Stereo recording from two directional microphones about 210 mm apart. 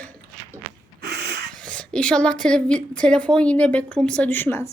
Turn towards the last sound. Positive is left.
turn(degrees=10)  # may be behind; listen again after turning